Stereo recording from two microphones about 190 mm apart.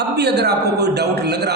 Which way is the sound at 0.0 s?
60° right (ahead or behind).